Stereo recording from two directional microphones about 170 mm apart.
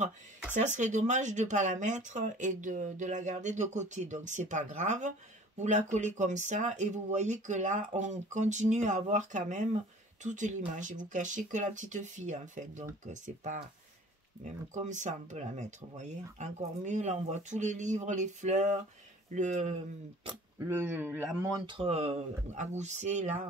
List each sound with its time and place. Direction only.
0.6 s speech: 45° right (ahead or behind)
20.5 s a man's voice: 15° right (ahead or behind)
21.5 s speech: 25° right (ahead or behind); by 23.3 s 45° right (ahead or behind)